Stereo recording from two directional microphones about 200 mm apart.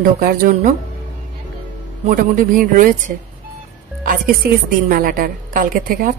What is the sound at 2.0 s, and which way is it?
Speech, 40° right (ahead or behind).